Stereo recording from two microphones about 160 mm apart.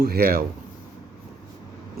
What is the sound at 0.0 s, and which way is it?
Speech, 70° right (ahead or behind).